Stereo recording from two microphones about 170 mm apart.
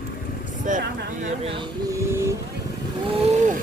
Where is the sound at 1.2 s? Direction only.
35° right (ahead or behind).